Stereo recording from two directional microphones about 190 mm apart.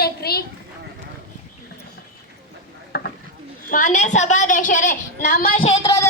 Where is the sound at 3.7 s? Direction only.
40° left (ahead or behind).